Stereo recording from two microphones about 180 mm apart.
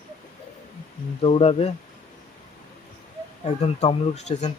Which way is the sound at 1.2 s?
35° left (ahead or behind).